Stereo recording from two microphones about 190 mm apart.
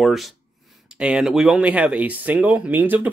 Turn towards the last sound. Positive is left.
turn(degrees=-10)  # may be behind; listen again after turning